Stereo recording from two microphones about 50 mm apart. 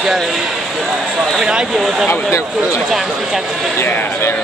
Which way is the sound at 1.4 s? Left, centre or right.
Centre.